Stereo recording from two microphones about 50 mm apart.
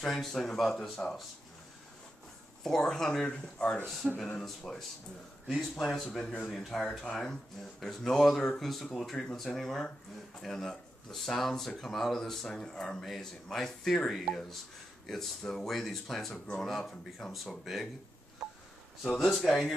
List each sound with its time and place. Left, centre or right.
0.0 s speech: centre
2.6 s speech: centre
6.1 s speech: centre
19.1 s speech: centre